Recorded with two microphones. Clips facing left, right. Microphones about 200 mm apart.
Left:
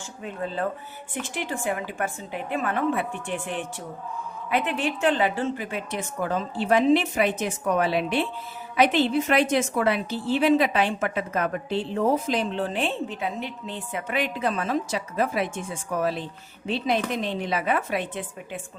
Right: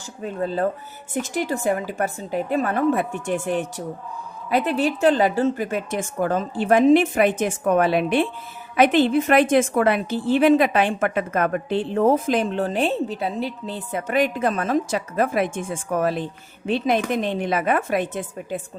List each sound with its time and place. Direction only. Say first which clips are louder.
0.2 s a woman's voice: right 6 dB; 40° right (ahead or behind)